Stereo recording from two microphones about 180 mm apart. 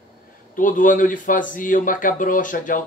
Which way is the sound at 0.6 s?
50° left (ahead or behind).